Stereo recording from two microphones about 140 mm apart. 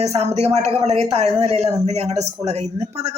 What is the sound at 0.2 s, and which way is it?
Speech, 50° right (ahead or behind).